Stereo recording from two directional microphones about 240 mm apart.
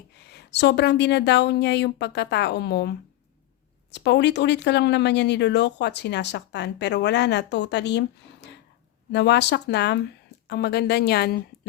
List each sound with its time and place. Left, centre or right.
0.3 s speech: left
3.9 s speech: left